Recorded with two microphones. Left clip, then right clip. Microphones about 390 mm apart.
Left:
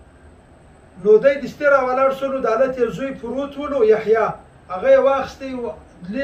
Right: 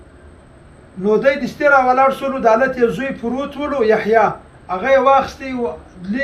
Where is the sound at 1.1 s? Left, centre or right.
Centre.